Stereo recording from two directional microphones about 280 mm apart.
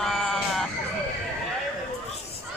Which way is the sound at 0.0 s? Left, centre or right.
Centre.